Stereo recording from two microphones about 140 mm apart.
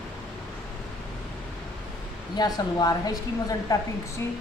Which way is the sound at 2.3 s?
30° left (ahead or behind).